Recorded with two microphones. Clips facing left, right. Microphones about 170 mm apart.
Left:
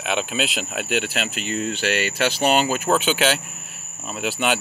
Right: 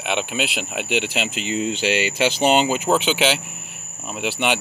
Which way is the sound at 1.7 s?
20° right (ahead or behind).